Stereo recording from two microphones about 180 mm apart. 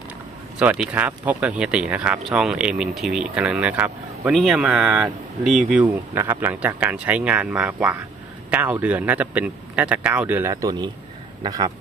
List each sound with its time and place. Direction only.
0.6 s a man's voice: 10° right (ahead or behind)
5.8 s a man's voice: 15° right (ahead or behind)